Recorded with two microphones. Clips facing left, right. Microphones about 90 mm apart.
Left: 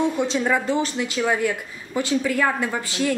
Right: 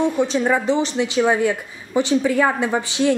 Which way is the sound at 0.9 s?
20° right (ahead or behind).